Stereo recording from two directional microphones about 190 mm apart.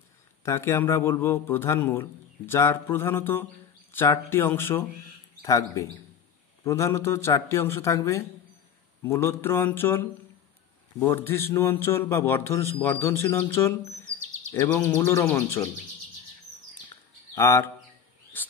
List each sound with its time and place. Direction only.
0.5 s a man's voice: 15° left (ahead or behind)
17.4 s a man's voice: 15° left (ahead or behind)
18.3 s a sound: 10° left (ahead or behind)